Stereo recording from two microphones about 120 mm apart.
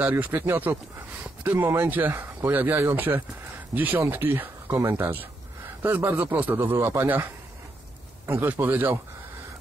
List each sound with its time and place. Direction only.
0.0 s speech: 15° right (ahead or behind)
8.3 s speech: 20° right (ahead or behind)